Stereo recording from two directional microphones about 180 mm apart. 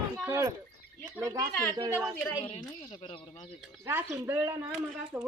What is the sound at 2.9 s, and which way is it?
Speech, 30° left (ahead or behind).